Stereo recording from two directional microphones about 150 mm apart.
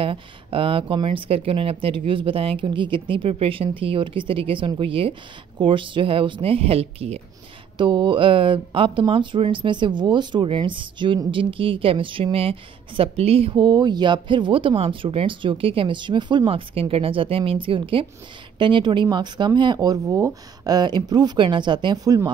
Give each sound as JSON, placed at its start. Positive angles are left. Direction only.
{"t": 0.0, "sound": "speech", "side_deg": -35}